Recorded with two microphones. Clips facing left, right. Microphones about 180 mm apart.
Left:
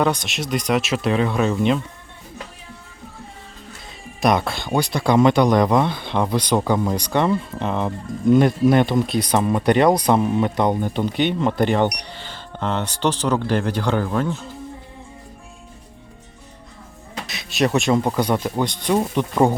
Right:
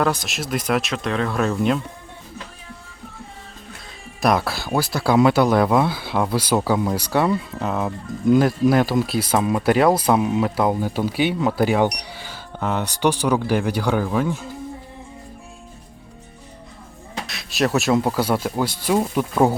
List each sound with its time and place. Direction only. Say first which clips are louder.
0.0 s speech: left 1 dB; centre (ahead or behind)
4.2 s speech: left 1 dB; centre (ahead or behind)
17.2 s speech: left 1 dB; centre (ahead or behind)